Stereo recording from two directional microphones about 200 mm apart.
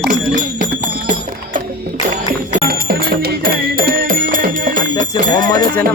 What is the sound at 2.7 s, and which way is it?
Music, 50° right (ahead or behind).